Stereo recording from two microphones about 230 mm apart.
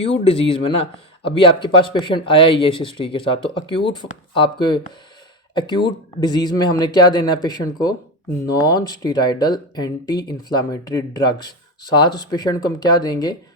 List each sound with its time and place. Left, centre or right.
0.0 s speech: left